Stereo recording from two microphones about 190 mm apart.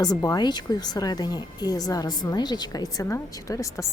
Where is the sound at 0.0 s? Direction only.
20° left (ahead or behind).